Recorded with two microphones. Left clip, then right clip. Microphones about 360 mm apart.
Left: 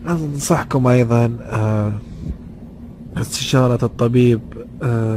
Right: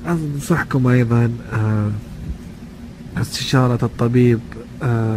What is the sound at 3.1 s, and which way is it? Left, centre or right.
A man's voice, centre.